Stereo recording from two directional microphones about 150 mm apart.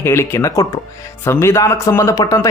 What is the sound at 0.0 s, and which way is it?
Speech, 15° left (ahead or behind).